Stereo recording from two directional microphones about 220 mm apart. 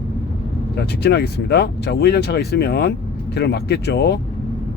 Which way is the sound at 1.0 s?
50° left (ahead or behind).